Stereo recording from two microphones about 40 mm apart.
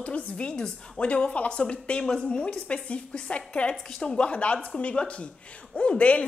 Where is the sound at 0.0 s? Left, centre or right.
Left.